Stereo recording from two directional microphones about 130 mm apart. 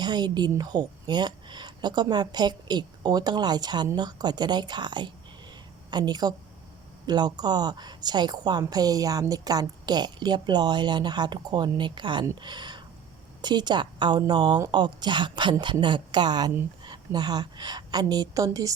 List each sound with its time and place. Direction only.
0.0 s a woman's voice: 35° right (ahead or behind)